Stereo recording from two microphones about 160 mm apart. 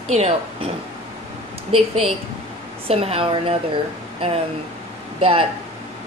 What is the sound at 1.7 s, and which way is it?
A woman's voice, 35° right (ahead or behind).